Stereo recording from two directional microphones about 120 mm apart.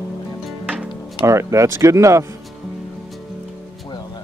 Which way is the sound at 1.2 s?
25° right (ahead or behind).